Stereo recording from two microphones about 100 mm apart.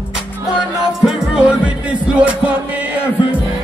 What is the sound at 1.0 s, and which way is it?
Music, 5° right (ahead or behind).